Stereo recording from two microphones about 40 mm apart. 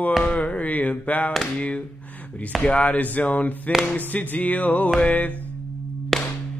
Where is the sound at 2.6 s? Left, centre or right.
Left.